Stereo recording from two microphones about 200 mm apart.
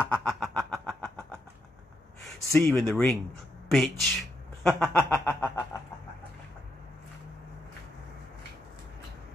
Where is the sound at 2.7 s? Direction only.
5° left (ahead or behind).